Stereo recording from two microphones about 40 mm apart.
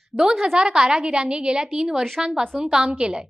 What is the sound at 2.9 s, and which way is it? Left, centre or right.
Speech, right.